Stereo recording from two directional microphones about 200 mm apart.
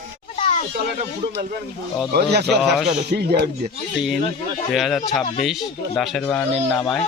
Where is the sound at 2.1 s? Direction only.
55° right (ahead or behind).